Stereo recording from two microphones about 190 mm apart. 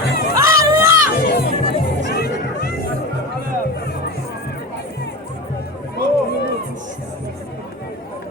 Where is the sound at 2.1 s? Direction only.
55° left (ahead or behind).